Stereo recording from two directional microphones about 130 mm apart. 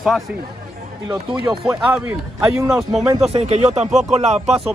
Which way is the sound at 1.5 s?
5° right (ahead or behind).